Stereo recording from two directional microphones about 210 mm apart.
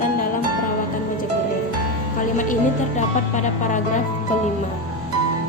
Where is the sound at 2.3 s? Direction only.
35° left (ahead or behind).